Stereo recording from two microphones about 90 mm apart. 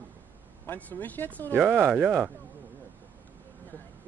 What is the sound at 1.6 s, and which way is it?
Speech, 15° right (ahead or behind).